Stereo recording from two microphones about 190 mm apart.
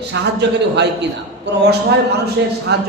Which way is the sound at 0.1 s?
65° right (ahead or behind).